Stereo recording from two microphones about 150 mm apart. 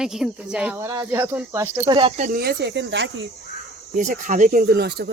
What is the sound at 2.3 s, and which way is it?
Speech, 90° right.